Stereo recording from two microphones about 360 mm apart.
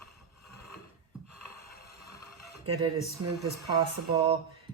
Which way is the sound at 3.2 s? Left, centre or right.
Right.